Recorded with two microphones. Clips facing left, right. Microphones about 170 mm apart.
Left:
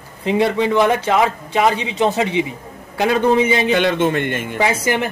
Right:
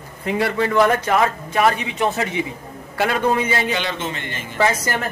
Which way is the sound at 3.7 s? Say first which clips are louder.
Left 9 dB; 55° left (ahead or behind).